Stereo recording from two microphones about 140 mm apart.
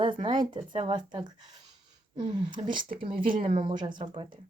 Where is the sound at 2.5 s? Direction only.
35° right (ahead or behind).